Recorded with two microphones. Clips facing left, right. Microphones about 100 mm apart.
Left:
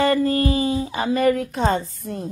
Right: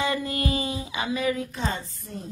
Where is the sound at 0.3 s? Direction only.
35° left (ahead or behind).